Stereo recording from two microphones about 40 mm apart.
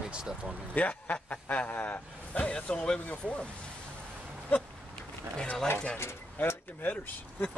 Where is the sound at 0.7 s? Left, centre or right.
Left.